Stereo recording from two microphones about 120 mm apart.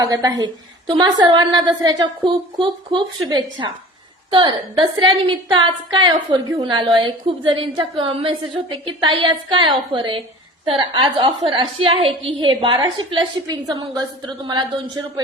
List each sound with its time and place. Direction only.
0.0 s a woman's voice: 30° right (ahead or behind)